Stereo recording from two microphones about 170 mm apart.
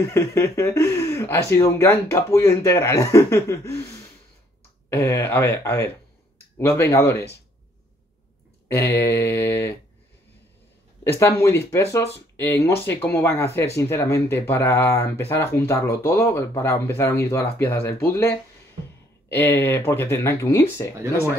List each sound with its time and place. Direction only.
0.0 s speech: 15° left (ahead or behind)
4.8 s speech: 15° left (ahead or behind)
8.9 s speech: 15° left (ahead or behind)
11.1 s speech: 15° left (ahead or behind)